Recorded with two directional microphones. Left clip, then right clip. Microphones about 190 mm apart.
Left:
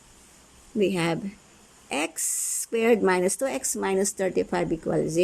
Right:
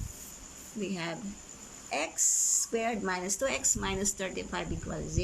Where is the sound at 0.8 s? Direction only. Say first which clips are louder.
Left 12 dB; 45° left (ahead or behind).